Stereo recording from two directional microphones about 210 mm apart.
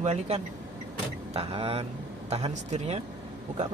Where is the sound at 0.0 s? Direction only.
30° right (ahead or behind).